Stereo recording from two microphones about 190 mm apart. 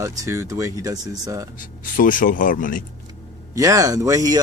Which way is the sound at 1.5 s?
45° left (ahead or behind).